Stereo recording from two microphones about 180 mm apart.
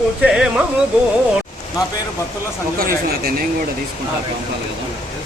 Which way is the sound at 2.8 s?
55° right (ahead or behind).